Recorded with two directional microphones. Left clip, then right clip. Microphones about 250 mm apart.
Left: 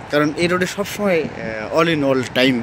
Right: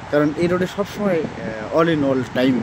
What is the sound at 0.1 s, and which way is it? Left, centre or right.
Speech, left.